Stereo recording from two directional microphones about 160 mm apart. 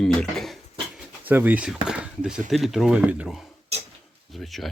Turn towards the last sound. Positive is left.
turn(degrees=0)  # may be behind; listen again after turning